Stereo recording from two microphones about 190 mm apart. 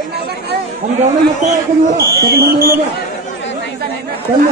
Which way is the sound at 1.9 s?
55° right (ahead or behind).